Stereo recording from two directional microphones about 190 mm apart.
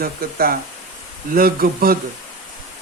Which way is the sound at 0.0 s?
50° right (ahead or behind).